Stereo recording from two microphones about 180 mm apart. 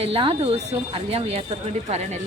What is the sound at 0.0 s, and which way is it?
A woman's voice, 30° right (ahead or behind).